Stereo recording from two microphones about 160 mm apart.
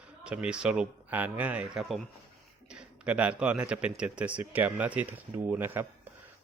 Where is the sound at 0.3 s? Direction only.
5° right (ahead or behind).